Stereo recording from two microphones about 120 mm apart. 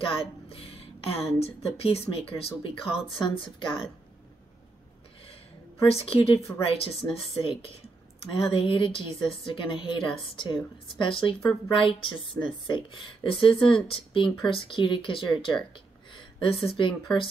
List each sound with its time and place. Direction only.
0.0 s speech: 45° left (ahead or behind)
5.2 s a sound: 50° left (ahead or behind)
6.6 s speech: 50° left (ahead or behind)